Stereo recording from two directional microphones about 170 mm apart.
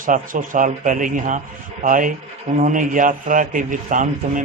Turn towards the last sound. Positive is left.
turn(degrees=-50)  # may be behind; listen again after turning